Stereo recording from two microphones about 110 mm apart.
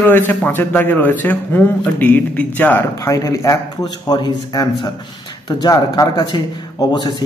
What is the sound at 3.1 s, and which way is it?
A man's voice, 30° left (ahead or behind).